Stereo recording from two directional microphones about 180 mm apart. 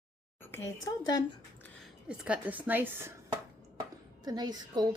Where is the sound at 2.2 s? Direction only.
5° right (ahead or behind).